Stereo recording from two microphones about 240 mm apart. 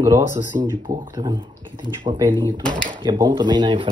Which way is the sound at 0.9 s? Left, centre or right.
Right.